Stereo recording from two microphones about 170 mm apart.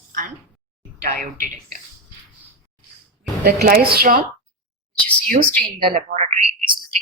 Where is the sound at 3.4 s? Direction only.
55° right (ahead or behind).